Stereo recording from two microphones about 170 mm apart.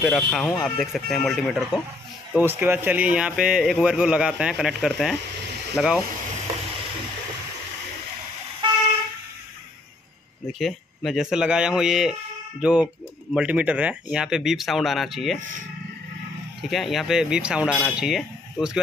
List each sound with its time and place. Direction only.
0.0 s a man's voice: centre (ahead or behind)
2.3 s a man's voice: 10° right (ahead or behind)
8.6 s vehicle: 30° right (ahead or behind)
10.6 s a man's voice: centre (ahead or behind)
16.7 s a man's voice: centre (ahead or behind)